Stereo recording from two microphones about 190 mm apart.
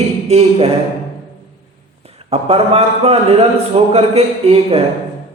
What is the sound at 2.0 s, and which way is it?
A man's voice, 30° right (ahead or behind).